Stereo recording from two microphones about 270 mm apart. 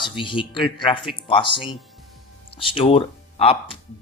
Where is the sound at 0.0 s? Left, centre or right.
Centre.